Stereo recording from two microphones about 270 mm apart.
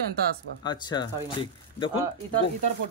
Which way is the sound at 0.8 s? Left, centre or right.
Centre.